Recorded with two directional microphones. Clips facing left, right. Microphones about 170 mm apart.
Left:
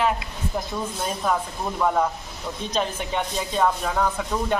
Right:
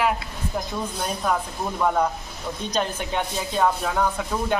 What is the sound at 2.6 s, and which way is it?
Speech, centre (ahead or behind).